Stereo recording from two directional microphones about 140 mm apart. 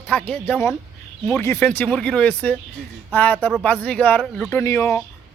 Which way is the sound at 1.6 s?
10° left (ahead or behind).